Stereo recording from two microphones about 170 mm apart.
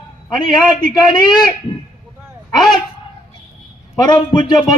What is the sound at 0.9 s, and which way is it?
Speech, 25° left (ahead or behind).